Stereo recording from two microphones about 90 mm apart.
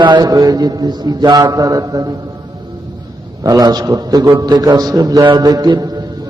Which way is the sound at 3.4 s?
45° right (ahead or behind).